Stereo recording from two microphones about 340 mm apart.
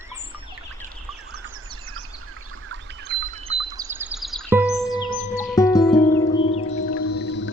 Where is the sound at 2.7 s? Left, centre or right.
Right.